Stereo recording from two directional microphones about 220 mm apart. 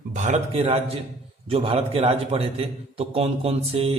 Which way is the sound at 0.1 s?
35° right (ahead or behind).